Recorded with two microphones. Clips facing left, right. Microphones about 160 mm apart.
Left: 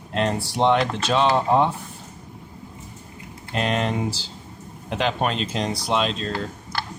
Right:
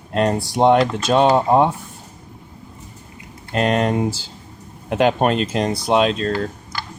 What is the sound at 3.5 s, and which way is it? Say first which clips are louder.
Speech: right 5 dB; 45° right (ahead or behind).